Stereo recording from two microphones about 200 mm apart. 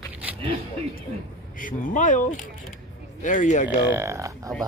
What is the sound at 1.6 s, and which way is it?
Speech, 40° left (ahead or behind).